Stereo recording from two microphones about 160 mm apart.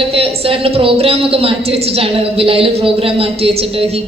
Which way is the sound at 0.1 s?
35° right (ahead or behind).